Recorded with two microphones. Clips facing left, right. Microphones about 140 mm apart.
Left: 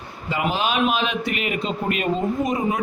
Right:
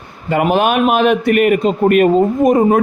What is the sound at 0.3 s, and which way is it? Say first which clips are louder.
A man's voice: right 10 dB; 55° right (ahead or behind).